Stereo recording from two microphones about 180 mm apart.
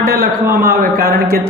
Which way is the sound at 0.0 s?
55° right (ahead or behind).